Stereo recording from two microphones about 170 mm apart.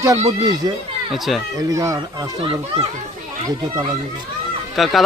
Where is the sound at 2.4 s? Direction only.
30° right (ahead or behind).